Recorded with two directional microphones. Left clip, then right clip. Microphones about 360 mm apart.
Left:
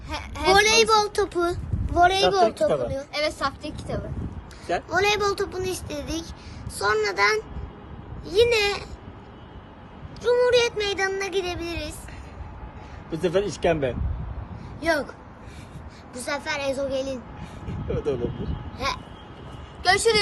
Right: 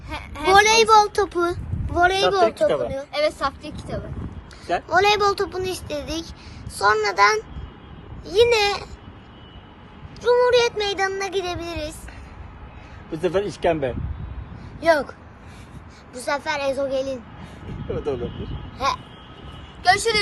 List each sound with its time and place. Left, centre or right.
0.1 s a sound: centre
0.5 s a child's voice: centre
3.1 s a child's voice: centre
4.9 s a child's voice: centre
10.2 s speech: centre
13.1 s speech: centre
16.1 s speech: centre
19.8 s a woman's voice: centre